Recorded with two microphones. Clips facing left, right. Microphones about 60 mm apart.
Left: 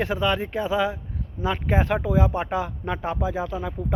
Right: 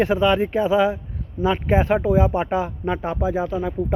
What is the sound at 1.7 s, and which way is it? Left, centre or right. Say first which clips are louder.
Speech: right 5 dB; centre.